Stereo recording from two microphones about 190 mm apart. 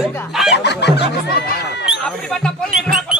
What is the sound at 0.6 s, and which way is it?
Snicker, 60° left (ahead or behind).